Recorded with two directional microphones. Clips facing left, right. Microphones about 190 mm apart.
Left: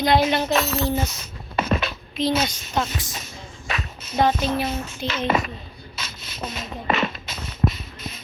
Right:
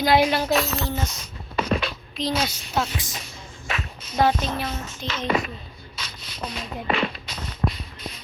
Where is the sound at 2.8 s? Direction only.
5° right (ahead or behind).